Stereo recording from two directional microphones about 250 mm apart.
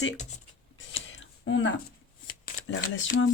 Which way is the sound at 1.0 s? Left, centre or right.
Left.